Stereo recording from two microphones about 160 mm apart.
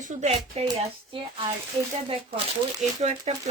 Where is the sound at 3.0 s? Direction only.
45° right (ahead or behind).